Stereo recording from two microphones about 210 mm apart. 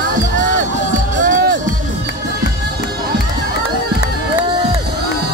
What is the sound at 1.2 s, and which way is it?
Music, 40° right (ahead or behind).